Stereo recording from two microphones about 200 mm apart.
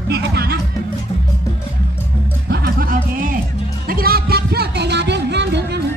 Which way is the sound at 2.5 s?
50° right (ahead or behind).